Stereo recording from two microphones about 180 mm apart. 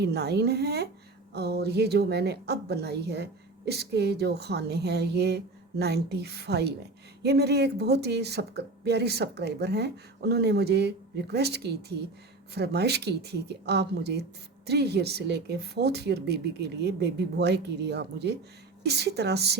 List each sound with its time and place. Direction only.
0.0 s speech: 65° right (ahead or behind)